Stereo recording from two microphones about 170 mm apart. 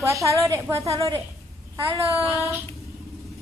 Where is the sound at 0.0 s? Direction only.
15° right (ahead or behind).